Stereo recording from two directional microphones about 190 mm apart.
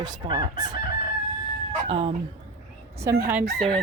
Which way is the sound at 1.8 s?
30° right (ahead or behind).